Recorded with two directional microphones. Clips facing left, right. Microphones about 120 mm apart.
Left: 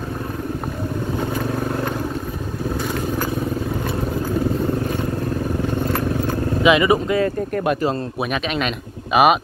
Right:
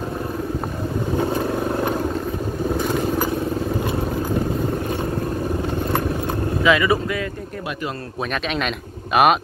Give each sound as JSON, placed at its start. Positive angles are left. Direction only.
{"t": 6.6, "sound": "speech", "side_deg": 20}
{"t": 8.5, "sound": "speech", "side_deg": 0}